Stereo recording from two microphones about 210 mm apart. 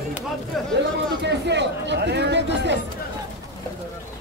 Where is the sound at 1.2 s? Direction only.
55° right (ahead or behind).